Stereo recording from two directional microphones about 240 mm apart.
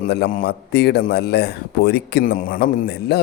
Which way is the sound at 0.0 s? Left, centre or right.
Left.